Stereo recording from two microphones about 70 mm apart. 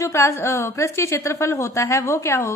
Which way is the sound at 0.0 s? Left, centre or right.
Left.